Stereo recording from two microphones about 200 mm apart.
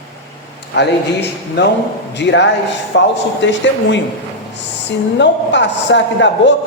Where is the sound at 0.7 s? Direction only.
60° left (ahead or behind).